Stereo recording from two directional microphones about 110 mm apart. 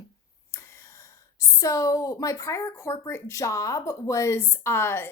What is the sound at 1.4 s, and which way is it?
Speech, 30° left (ahead or behind).